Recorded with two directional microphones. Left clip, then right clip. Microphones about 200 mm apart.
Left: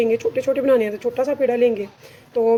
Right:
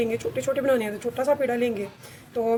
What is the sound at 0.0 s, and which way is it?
Speech, 40° left (ahead or behind).